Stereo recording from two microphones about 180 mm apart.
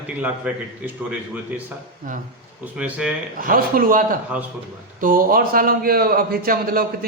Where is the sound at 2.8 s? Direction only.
5° right (ahead or behind).